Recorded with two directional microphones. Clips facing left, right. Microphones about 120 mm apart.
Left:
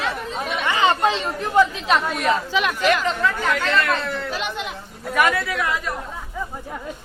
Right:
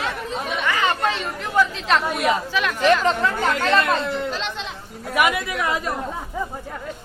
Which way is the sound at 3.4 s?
35° right (ahead or behind).